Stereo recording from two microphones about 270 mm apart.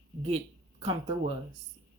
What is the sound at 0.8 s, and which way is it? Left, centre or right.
Speech, centre.